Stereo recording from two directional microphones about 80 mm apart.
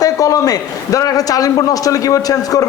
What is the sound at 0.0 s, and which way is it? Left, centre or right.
A man's voice, left.